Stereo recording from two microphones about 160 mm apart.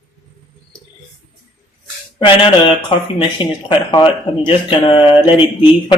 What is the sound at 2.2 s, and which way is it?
Speech, 30° left (ahead or behind).